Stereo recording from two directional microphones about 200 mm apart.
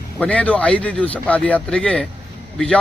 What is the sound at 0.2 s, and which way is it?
A man's voice, 5° left (ahead or behind).